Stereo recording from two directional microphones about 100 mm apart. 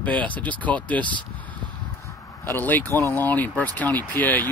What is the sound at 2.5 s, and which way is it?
Speech, 20° left (ahead or behind).